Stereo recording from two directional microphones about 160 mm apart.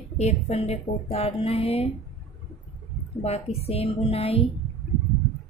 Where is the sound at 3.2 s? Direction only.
40° left (ahead or behind).